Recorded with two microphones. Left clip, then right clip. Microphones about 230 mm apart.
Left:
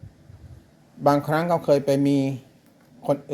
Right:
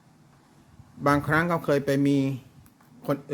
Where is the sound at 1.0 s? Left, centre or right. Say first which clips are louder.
Left 2 dB; centre.